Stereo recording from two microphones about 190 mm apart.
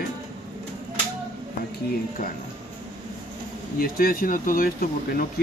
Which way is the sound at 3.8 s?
50° left (ahead or behind).